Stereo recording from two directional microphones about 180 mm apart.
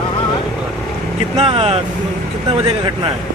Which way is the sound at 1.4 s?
35° right (ahead or behind).